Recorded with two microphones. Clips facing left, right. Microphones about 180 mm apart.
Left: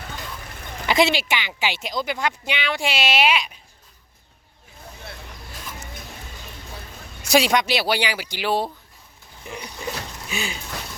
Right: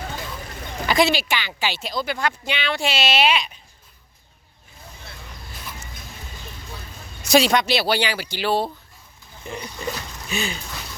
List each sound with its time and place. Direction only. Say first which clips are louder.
0.9 s speech: even; 25° left (ahead or behind)
7.3 s speech: right 1 dB; 10° left (ahead or behind)